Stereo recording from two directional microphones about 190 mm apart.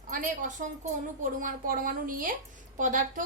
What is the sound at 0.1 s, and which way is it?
A woman's voice, 45° right (ahead or behind).